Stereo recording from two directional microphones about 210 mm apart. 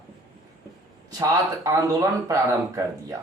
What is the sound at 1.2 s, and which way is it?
Speech, 15° right (ahead or behind).